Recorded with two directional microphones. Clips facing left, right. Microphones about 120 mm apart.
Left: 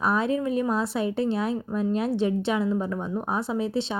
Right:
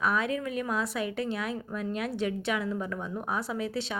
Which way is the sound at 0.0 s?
30° left (ahead or behind).